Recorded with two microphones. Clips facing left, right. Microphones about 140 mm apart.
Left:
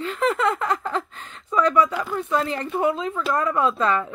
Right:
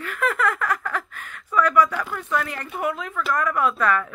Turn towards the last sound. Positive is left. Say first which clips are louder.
# even
turn(degrees=25)  # may be behind; listen again after turning